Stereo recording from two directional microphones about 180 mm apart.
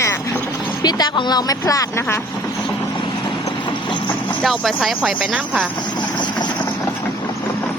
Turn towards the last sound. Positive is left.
turn(degrees=25)  # may be behind; listen again after turning